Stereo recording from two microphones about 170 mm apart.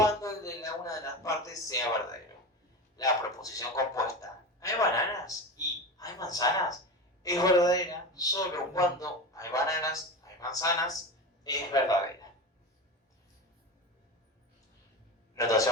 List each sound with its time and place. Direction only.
0.0 s speech: 20° left (ahead or behind)
2.9 s a man's voice: 20° left (ahead or behind)
15.4 s a man's voice: 20° left (ahead or behind)